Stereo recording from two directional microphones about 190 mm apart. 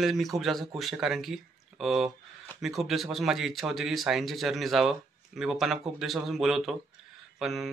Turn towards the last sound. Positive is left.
turn(degrees=0)  # may be behind; listen again after turning